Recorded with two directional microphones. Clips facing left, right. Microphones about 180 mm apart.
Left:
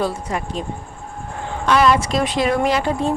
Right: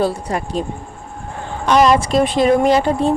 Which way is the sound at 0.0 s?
35° right (ahead or behind).